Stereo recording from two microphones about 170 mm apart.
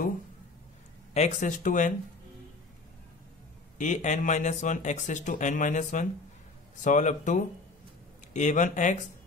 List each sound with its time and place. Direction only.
1.1 s speech: 45° left (ahead or behind)
3.7 s speech: 45° left (ahead or behind)